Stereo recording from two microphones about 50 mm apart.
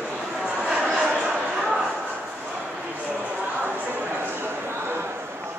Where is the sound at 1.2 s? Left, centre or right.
Centre.